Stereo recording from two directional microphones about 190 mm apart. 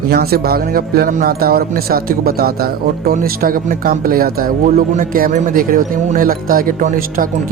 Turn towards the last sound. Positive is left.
turn(degrees=-50)  # may be behind; listen again after turning